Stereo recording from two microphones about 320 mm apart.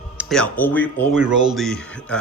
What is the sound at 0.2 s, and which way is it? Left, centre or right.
Speech, centre.